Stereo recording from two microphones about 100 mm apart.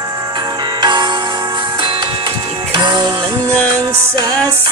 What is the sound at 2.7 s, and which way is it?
Music, 50° right (ahead or behind).